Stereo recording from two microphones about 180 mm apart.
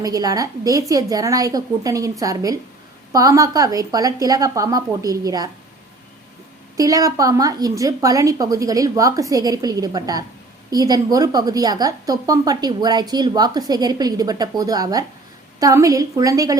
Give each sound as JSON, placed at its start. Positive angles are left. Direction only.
{"t": 0.0, "sound": "a woman's voice", "side_deg": -20}
{"t": 6.7, "sound": "a woman's voice", "side_deg": -20}